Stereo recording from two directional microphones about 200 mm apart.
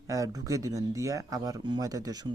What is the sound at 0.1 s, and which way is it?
Speech, 15° right (ahead or behind).